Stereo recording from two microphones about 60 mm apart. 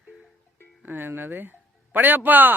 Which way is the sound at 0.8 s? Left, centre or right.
Right.